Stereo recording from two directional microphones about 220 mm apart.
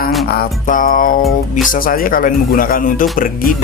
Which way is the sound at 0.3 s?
40° left (ahead or behind).